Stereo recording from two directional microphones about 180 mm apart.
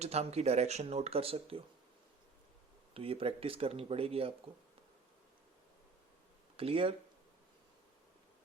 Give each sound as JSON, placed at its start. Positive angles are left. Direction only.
{"t": 0.0, "sound": "speech", "side_deg": -35}
{"t": 2.9, "sound": "speech", "side_deg": -30}
{"t": 6.6, "sound": "speech", "side_deg": -30}